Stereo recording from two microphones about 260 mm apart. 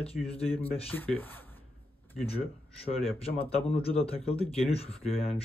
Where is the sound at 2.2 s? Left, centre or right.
Left.